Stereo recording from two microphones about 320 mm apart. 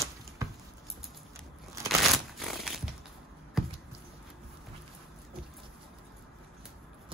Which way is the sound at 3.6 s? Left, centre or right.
Centre.